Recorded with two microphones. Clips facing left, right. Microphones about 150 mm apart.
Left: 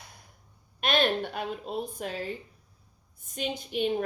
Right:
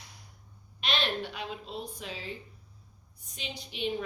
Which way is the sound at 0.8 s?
50° left (ahead or behind).